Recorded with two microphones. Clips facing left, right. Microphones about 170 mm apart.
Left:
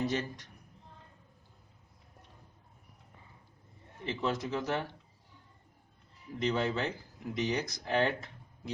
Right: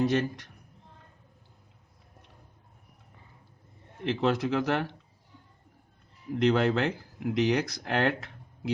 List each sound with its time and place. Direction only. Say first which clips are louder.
0.0 s speech: right 7 dB; 75° right (ahead or behind)
4.0 s speech: right 7 dB; 80° right
6.4 s speech: right 7 dB; 75° right (ahead or behind)